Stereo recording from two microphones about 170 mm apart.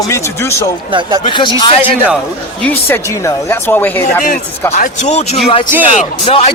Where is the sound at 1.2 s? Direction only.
25° left (ahead or behind).